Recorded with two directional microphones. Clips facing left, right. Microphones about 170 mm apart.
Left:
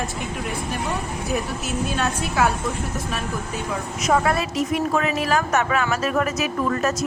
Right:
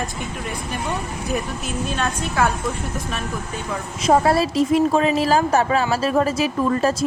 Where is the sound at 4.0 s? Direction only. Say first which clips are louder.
Right 4 dB; 30° right (ahead or behind).